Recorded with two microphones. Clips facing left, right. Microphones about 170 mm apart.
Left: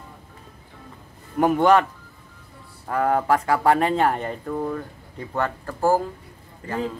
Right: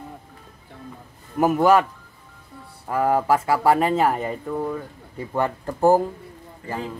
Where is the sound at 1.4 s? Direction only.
5° right (ahead or behind).